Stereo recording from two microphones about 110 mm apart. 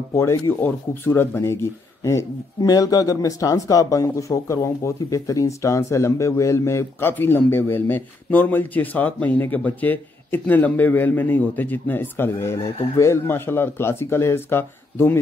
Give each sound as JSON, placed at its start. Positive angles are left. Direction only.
{"t": 0.1, "sound": "speech", "side_deg": 25}